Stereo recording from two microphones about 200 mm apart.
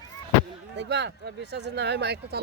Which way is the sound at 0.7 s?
60° right (ahead or behind).